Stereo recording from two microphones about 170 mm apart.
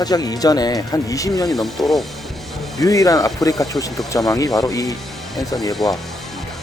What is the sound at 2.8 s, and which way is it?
Speech, 20° left (ahead or behind).